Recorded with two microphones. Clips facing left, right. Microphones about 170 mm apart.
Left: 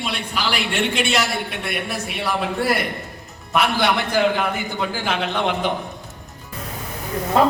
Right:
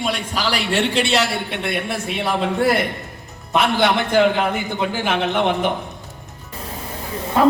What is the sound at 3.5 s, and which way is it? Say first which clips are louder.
A man's voice: right 2 dB; 20° right (ahead or behind).